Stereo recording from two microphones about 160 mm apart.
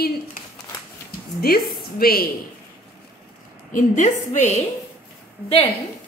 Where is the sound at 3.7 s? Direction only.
50° left (ahead or behind).